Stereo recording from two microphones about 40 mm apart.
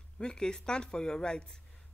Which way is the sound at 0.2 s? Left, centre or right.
Centre.